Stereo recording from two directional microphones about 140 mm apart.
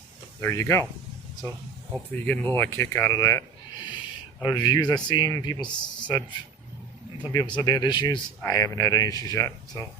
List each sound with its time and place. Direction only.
0.4 s speech: 20° left (ahead or behind)
2.2 s speech: 10° left (ahead or behind)
4.5 s speech: 30° left (ahead or behind)
7.3 s speech: 30° left (ahead or behind)